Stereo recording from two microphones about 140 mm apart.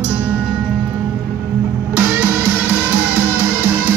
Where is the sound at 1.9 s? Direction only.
15° right (ahead or behind).